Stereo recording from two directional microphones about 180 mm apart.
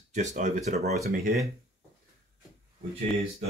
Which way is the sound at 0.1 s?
40° right (ahead or behind).